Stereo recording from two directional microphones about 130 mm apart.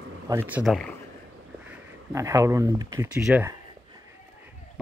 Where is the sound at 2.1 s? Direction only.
25° right (ahead or behind).